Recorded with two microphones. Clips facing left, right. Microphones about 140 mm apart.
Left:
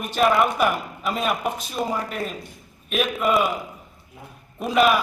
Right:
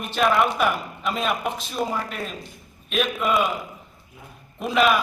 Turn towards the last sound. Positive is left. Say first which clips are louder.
# left 1 dB
turn(degrees=5)  # may be behind; listen again after turning